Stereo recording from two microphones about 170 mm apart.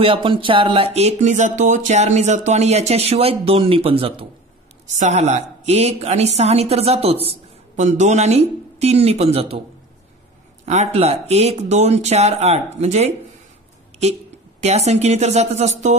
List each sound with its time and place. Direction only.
0.0 s a woman's voice: 30° right (ahead or behind)
4.8 s a woman's voice: 45° right (ahead or behind)
10.6 s a woman's voice: 40° right (ahead or behind)
14.6 s a woman's voice: 40° right (ahead or behind)